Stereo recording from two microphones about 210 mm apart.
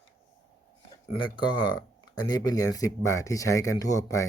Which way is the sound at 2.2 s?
20° left (ahead or behind).